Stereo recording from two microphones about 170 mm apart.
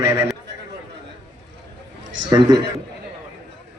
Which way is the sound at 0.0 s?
15° right (ahead or behind).